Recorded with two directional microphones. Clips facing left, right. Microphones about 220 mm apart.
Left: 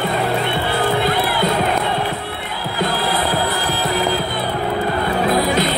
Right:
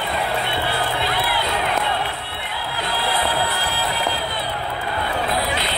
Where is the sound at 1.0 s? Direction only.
45° left (ahead or behind).